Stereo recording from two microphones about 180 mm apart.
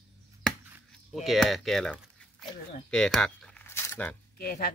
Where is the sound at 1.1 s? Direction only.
Centre (ahead or behind).